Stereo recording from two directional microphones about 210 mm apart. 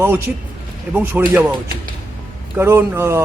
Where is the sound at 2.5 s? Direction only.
10° right (ahead or behind).